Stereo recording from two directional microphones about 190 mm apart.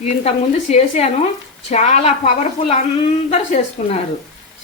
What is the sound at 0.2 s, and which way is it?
A woman's voice, 35° left (ahead or behind).